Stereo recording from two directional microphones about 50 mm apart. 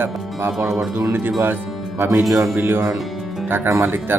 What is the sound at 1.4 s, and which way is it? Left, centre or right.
Music, right.